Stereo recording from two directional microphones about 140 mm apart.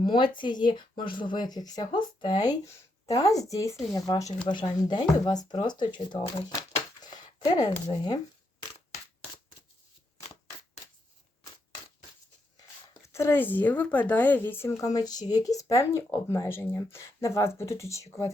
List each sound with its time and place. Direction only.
0.0 s speech: 35° left (ahead or behind)
7.0 s a sound: 30° left (ahead or behind)
12.5 s speech: 25° left (ahead or behind)
14.8 s speech: 25° left (ahead or behind)